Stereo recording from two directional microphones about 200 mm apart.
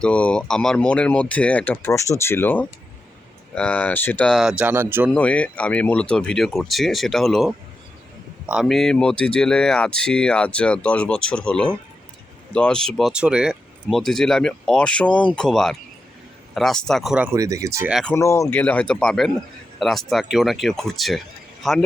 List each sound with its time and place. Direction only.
0.0 s speech: 5° left (ahead or behind); by 5.1 s 10° right (ahead or behind)
5.1 s speech: 5° left (ahead or behind)
17.3 s speech: 15° right (ahead or behind)
18.0 s a man's voice: 10° left (ahead or behind)